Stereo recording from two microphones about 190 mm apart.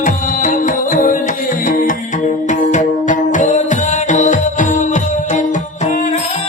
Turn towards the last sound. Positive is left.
turn(degrees=40)  # may be behind; listen again after turning